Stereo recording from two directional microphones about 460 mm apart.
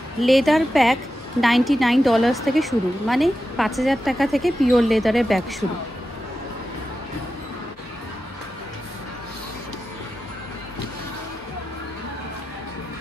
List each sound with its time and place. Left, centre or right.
0.2 s a woman's voice: centre